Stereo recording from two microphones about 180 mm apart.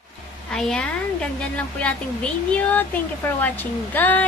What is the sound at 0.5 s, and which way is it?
Speech, 5° left (ahead or behind).